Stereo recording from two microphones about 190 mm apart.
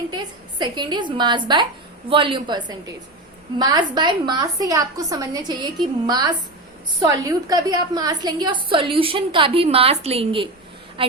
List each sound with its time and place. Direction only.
0.6 s a woman's voice: 25° right (ahead or behind)